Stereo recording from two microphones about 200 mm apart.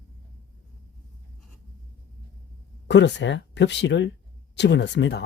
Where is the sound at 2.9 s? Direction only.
60° left (ahead or behind).